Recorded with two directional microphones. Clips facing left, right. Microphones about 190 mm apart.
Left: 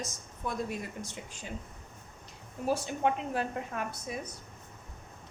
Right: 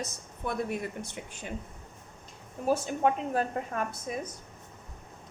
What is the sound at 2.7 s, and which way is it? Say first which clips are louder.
A woman's voice: right 3 dB; 45° right (ahead or behind).